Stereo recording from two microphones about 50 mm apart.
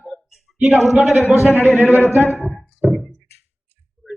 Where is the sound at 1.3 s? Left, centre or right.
Right.